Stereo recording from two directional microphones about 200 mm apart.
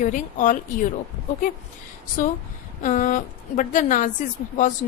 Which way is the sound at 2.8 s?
40° left (ahead or behind).